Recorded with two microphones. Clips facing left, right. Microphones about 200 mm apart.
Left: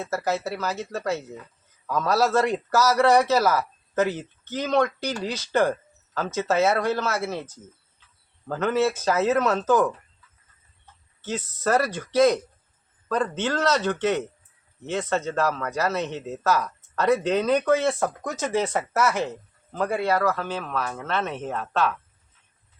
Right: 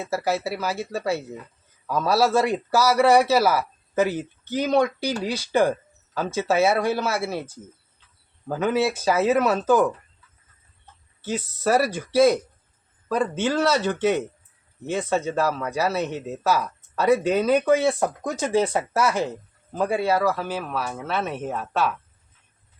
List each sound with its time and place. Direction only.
0.0 s speech: 10° right (ahead or behind)
11.2 s speech: 10° right (ahead or behind)